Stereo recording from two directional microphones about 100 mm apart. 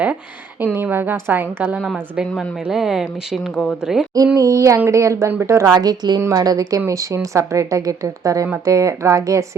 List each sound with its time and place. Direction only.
0.6 s a woman's voice: 20° right (ahead or behind)
1.8 s speech: centre (ahead or behind)
4.4 s a woman's voice: 35° right (ahead or behind)
5.7 s a woman's voice: 40° right (ahead or behind)